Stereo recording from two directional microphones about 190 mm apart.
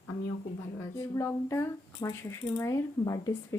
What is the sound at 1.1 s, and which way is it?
Speech, 15° left (ahead or behind).